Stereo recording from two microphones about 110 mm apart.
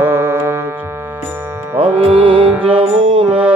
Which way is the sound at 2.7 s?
55° right (ahead or behind).